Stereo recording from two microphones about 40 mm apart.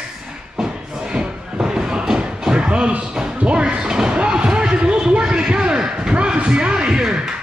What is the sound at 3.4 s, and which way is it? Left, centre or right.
Slam, right.